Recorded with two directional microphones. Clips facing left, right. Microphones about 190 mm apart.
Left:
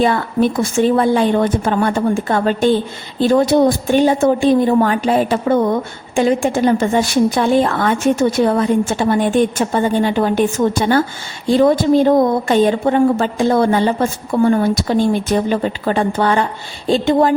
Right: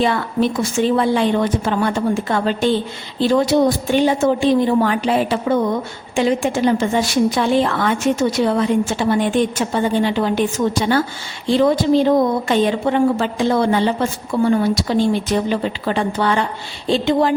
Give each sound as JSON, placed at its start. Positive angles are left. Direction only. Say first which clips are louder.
{"t": 0.0, "sound": "a woman's voice", "louder": "left 3 dB", "side_deg": 50}